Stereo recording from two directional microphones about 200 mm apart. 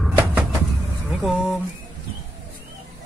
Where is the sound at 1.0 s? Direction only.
Centre (ahead or behind).